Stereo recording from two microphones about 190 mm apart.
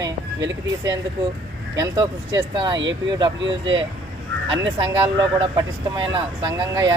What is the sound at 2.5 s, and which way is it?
Speech, 25° right (ahead or behind).